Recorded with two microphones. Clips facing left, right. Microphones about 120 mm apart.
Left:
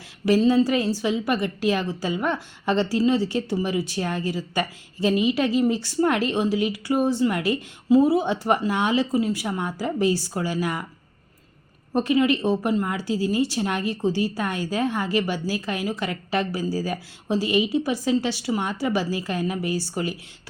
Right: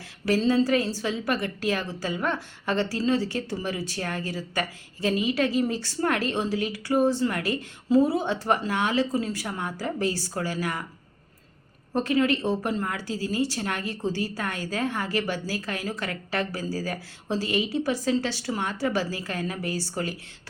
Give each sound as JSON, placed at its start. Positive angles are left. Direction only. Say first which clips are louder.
{"t": 0.3, "sound": "a woman's voice", "louder": "left 3 dB", "side_deg": 15}
{"t": 11.9, "sound": "a woman's voice", "louder": "left 3 dB", "side_deg": 15}